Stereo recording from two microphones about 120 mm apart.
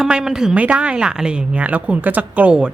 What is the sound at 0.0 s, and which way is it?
Speech, 5° right (ahead or behind).